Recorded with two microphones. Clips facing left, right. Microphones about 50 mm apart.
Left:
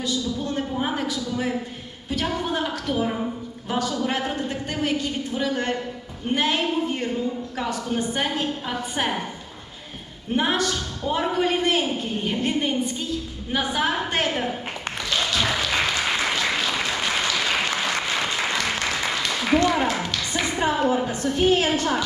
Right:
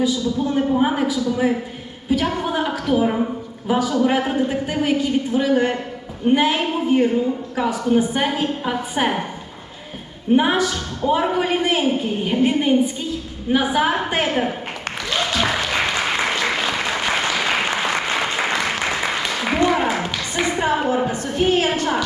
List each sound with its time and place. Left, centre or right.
0.0 s a woman's voice: centre
10.3 s a woman's voice: centre
15.1 s applause: centre
20.9 s a woman's voice: right